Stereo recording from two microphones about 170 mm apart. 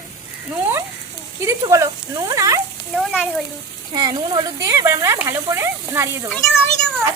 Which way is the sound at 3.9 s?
20° right (ahead or behind).